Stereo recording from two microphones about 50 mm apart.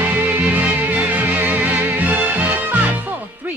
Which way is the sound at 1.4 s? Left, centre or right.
Right.